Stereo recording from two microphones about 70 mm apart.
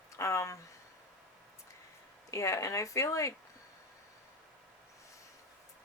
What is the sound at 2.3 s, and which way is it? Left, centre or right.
Speech, left.